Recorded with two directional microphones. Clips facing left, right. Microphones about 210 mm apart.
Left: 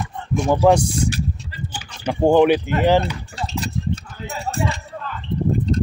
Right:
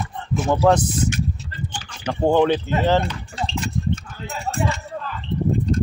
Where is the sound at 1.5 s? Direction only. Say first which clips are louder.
Even; 10° left (ahead or behind).